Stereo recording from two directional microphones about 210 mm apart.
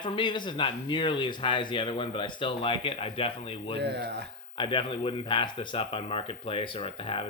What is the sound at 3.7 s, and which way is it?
Speech, 55° right (ahead or behind).